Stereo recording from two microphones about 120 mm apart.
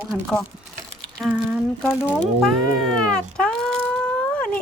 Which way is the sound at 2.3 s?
Centre (ahead or behind).